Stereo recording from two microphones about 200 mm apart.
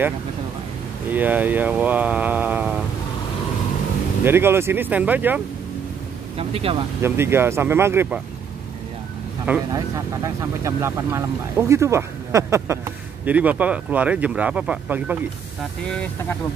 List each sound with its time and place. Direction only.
1.1 s speech: 10° right (ahead or behind)
4.2 s speech: 10° right (ahead or behind)
6.3 s speech: 30° right (ahead or behind)
7.0 s speech: 10° right (ahead or behind)
9.7 s speech: 15° right (ahead or behind)